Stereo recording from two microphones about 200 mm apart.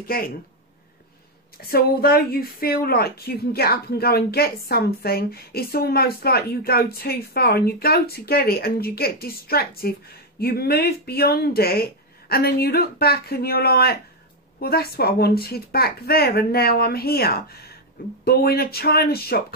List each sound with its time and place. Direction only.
0.0 s speech: 45° left (ahead or behind)
1.6 s speech: 50° left (ahead or behind)